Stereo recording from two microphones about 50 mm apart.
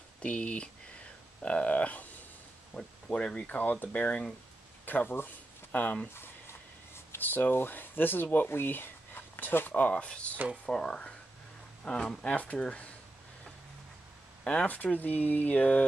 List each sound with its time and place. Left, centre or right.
0.2 s speech: left
2.7 s speech: centre
3.4 s speech: left
4.8 s speech: left
7.2 s speech: left
8.5 s a sound: left
9.8 s speech: left
10.3 s speech: right
10.7 s speech: left
12.4 s speech: left
14.4 s speech: left